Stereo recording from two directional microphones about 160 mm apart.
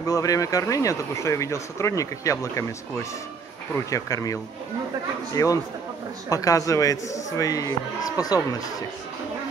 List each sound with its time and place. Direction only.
0.0 s speech: 20° left (ahead or behind)